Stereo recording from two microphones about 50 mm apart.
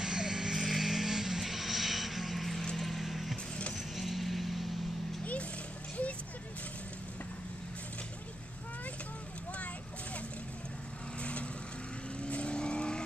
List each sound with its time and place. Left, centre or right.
0.0 s vehicle: centre
2.8 s music: centre
3.7 s vehicle: centre
12.2 s vehicle: left